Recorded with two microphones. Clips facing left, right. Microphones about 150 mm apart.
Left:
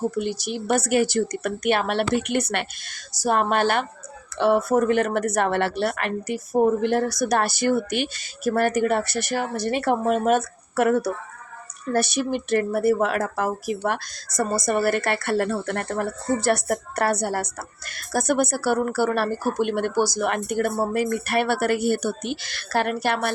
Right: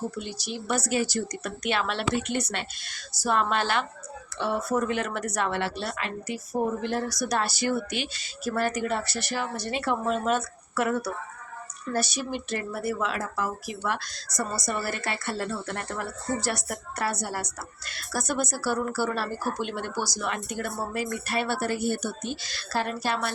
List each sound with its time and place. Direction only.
0.1 s a woman's voice: 55° left (ahead or behind)
3.1 s a woman's voice: 45° left (ahead or behind)
4.4 s a woman's voice: 65° left (ahead or behind)